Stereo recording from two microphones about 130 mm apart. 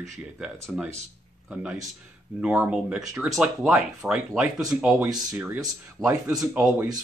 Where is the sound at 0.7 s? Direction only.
5° right (ahead or behind).